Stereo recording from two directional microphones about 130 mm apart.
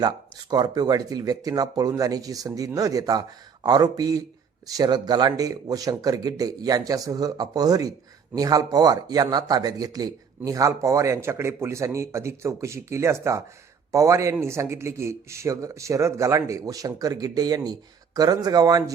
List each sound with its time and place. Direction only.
0.5 s speech: 30° right (ahead or behind)